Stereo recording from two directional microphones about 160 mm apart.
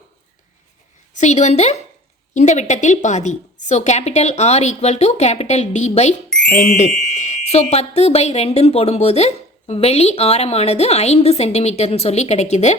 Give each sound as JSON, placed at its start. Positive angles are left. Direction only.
{"t": 1.1, "sound": "a woman's voice", "side_deg": 45}
{"t": 6.5, "sound": "a woman's voice", "side_deg": 55}